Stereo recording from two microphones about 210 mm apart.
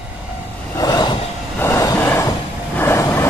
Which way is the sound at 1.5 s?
15° left (ahead or behind).